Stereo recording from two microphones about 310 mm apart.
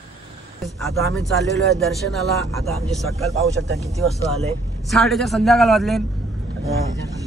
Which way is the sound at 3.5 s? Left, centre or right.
Right.